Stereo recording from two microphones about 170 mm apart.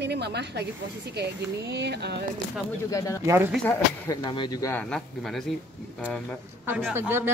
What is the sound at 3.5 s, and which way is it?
Speech, 5° left (ahead or behind).